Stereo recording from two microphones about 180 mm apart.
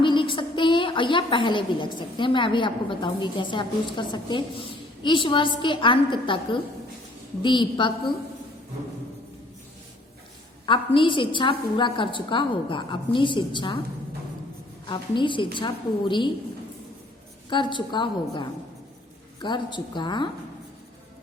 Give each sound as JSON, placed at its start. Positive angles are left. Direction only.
{"t": 0.0, "sound": "a woman's voice", "side_deg": 30}
{"t": 10.7, "sound": "a woman's voice", "side_deg": 30}
{"t": 14.8, "sound": "a woman's voice", "side_deg": 25}
{"t": 17.5, "sound": "a woman's voice", "side_deg": 25}